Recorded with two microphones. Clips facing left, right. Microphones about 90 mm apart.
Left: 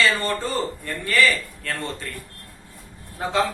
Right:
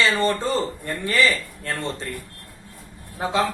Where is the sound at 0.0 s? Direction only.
25° right (ahead or behind).